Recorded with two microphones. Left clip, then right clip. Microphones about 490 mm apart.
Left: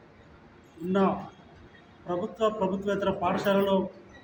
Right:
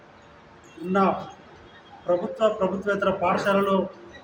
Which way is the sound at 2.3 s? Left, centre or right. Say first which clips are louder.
Right 4 dB; left.